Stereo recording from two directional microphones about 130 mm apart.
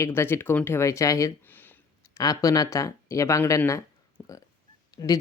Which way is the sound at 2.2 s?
25° left (ahead or behind).